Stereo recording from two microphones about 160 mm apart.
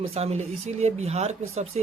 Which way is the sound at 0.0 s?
40° right (ahead or behind).